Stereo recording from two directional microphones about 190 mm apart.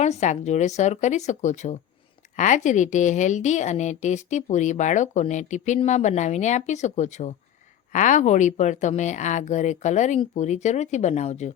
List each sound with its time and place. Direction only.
0.0 s a woman's voice: 35° left (ahead or behind)